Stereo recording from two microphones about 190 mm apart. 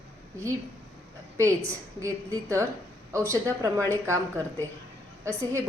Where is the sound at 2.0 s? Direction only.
15° right (ahead or behind).